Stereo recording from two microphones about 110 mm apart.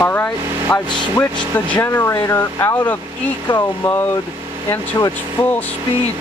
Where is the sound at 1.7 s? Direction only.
25° left (ahead or behind).